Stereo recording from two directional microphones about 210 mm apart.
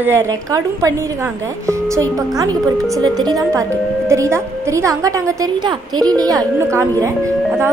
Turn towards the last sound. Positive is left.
turn(degrees=-15)  # may be behind; listen again after turning